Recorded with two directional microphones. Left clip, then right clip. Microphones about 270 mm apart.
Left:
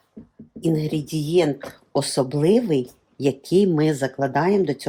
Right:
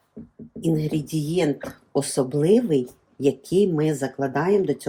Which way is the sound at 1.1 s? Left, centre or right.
Left.